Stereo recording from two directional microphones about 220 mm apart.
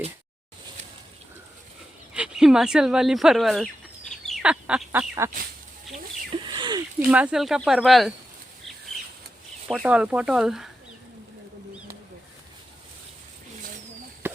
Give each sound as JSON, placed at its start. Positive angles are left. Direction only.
{"t": 2.1, "sound": "speech", "side_deg": -5}
{"t": 4.3, "sound": "fowl", "side_deg": -5}
{"t": 6.3, "sound": "a sound", "side_deg": -20}
{"t": 7.1, "sound": "speech", "side_deg": -5}
{"t": 9.6, "sound": "speech", "side_deg": 0}
{"t": 14.2, "sound": "a sound", "side_deg": -10}